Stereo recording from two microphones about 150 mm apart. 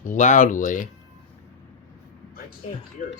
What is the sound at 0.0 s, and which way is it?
Speech, 55° left (ahead or behind).